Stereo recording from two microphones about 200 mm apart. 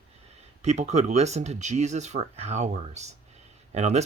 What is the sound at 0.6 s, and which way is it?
Speech, 35° right (ahead or behind).